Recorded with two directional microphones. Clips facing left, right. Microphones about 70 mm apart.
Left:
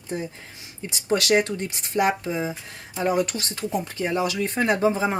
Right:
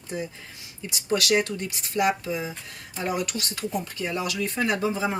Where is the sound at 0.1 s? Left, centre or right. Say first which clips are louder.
Left 2 dB; left.